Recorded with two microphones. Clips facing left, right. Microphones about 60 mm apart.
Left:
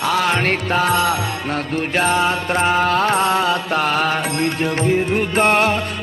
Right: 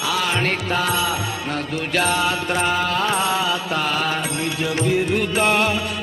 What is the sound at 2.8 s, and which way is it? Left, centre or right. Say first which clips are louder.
Music: left 4 dB; left.